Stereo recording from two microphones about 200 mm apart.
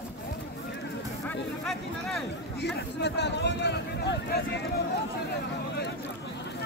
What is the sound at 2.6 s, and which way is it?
Speech, 55° left (ahead or behind).